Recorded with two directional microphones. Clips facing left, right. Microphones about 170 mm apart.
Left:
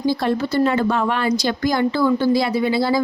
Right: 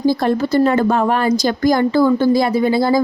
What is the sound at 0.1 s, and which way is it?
Speech, 45° right (ahead or behind).